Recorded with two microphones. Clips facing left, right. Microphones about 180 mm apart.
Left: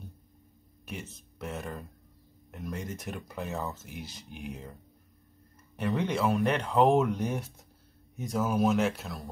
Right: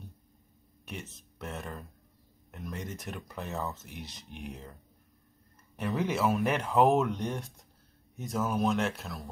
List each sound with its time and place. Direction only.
0.8 s speech: centre (ahead or behind)
5.8 s speech: centre (ahead or behind)